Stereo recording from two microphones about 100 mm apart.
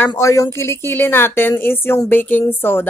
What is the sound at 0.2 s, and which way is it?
Speech, 30° left (ahead or behind).